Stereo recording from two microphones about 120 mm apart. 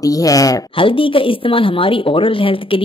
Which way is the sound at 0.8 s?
45° left (ahead or behind).